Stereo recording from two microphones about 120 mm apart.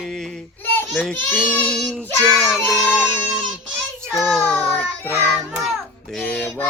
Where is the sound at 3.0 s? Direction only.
10° right (ahead or behind).